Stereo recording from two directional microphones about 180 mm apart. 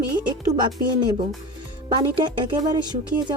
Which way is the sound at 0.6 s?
25° right (ahead or behind).